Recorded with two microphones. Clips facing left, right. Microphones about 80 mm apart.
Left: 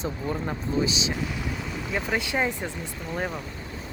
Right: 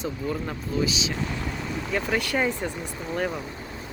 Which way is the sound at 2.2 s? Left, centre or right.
Centre.